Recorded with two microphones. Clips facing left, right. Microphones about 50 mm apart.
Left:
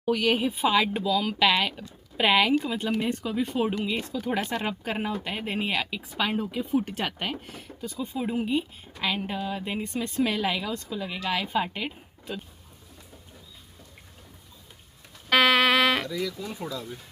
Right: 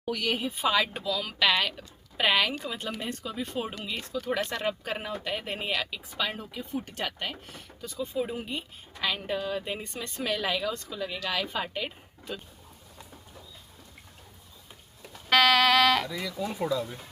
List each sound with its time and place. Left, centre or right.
0.1 s speech: left
0.7 s speech: centre
3.1 s speech: centre
6.1 s speech: left; by 8.3 s centre
8.3 s speech: centre
15.3 s speech: centre
16.0 s speech: centre